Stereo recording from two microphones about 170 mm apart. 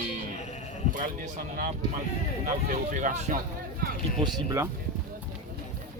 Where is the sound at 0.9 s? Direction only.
50° right (ahead or behind).